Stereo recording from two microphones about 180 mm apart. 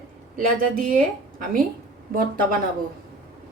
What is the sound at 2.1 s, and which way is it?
Speech, 50° right (ahead or behind).